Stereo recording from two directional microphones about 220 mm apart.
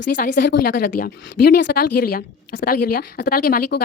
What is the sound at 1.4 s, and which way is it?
A woman's voice, 50° left (ahead or behind).